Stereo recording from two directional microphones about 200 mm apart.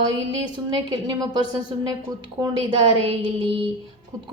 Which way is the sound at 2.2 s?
20° right (ahead or behind).